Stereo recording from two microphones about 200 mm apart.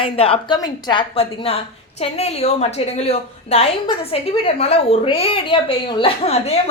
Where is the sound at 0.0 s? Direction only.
25° left (ahead or behind).